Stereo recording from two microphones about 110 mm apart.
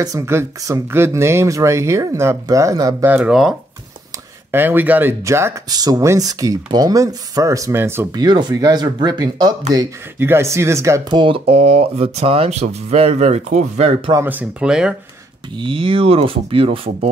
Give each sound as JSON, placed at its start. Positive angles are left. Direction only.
{"t": 0.0, "sound": "speech", "side_deg": -30}
{"t": 3.3, "sound": "speech", "side_deg": -5}
{"t": 4.5, "sound": "speech", "side_deg": -20}
{"t": 5.7, "sound": "speech", "side_deg": -35}
{"t": 8.1, "sound": "speech", "side_deg": -40}
{"t": 10.1, "sound": "speech", "side_deg": -20}
{"t": 11.1, "sound": "speech", "side_deg": -55}
{"t": 14.2, "sound": "speech", "side_deg": -15}
{"t": 15.5, "sound": "speech", "side_deg": -50}